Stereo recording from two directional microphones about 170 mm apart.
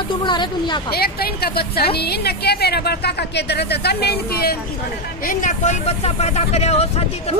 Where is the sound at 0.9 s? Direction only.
65° left (ahead or behind).